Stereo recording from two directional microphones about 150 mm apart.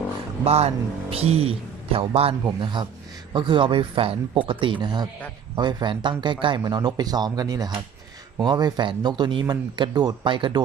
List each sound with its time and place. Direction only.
0.4 s a woman's voice: 45° right (ahead or behind)